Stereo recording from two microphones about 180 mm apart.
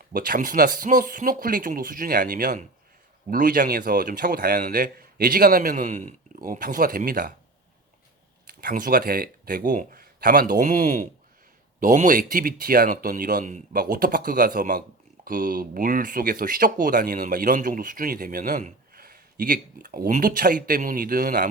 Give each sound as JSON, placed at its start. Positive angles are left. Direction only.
{"t": 0.1, "sound": "speech", "side_deg": -50}
{"t": 8.4, "sound": "speech", "side_deg": -50}